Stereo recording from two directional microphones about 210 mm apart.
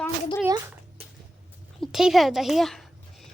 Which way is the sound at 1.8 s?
Centre (ahead or behind).